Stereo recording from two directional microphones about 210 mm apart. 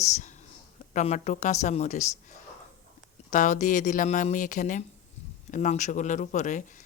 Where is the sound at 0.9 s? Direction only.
35° left (ahead or behind).